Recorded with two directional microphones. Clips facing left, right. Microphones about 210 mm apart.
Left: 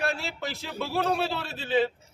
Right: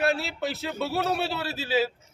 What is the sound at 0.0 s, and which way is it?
A man's voice, 5° right (ahead or behind).